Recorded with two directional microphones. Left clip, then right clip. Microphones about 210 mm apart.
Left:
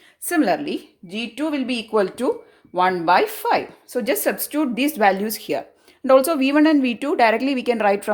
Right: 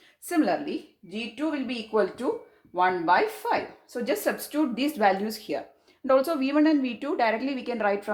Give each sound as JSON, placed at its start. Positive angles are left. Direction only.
{"t": 0.3, "sound": "a woman's voice", "side_deg": 35}